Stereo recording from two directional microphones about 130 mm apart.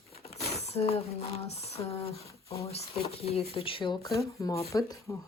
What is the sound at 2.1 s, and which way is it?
Speech, 25° left (ahead or behind).